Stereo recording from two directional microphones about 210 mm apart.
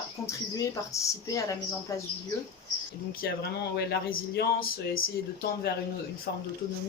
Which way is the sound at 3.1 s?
50° left (ahead or behind).